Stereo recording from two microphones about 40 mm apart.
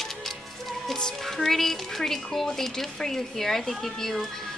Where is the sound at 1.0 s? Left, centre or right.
Centre.